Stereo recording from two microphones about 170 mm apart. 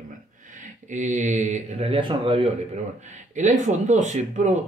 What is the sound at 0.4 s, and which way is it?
Speech, 45° right (ahead or behind).